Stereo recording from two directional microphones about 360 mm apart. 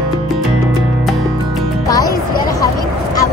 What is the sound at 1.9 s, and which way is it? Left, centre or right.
Music, centre.